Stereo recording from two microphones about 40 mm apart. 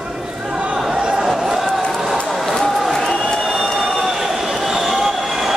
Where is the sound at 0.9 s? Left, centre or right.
Centre.